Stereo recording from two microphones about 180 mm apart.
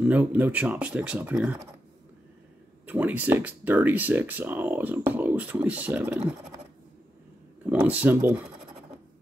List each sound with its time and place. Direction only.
0.0 s speech: 10° right (ahead or behind)
2.9 s speech: 10° right (ahead or behind)
7.7 s speech: 10° right (ahead or behind)